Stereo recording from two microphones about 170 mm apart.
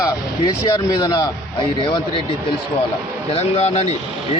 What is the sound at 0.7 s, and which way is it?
Speech, 20° left (ahead or behind).